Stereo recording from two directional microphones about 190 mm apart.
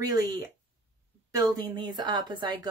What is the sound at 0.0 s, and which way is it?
Speech, 20° right (ahead or behind).